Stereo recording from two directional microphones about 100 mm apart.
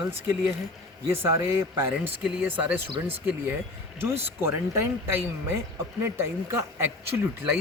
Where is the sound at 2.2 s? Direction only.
15° right (ahead or behind).